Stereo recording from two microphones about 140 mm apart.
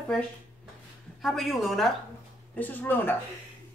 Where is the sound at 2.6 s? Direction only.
15° left (ahead or behind).